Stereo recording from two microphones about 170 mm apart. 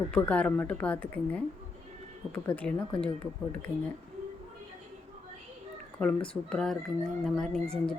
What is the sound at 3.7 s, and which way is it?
Speech, 15° right (ahead or behind).